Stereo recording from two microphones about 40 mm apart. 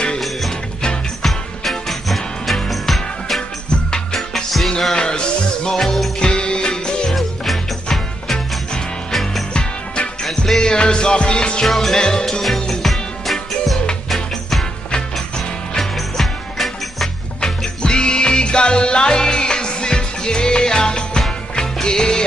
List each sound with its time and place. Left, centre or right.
1.2 s music: centre
3.9 s music: centre
4.9 s music: left
5.8 s music: centre
6.1 s music: left
7.2 s music: centre
9.5 s music: left
10.2 s music: centre
10.6 s music: left
11.6 s music: centre
12.0 s music: centre
15.8 s music: centre
17.4 s music: left